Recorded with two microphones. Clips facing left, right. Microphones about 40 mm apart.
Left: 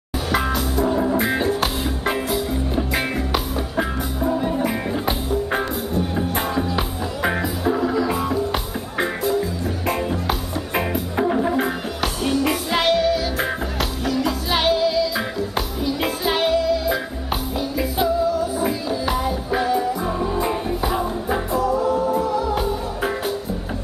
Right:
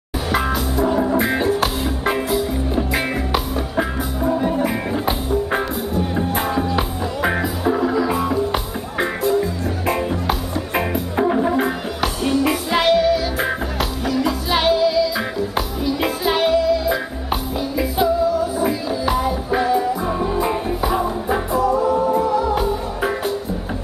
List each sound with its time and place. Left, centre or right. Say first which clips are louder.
0.3 s music: right 1 dB; centre